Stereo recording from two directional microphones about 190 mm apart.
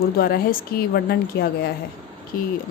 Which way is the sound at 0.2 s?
55° left (ahead or behind).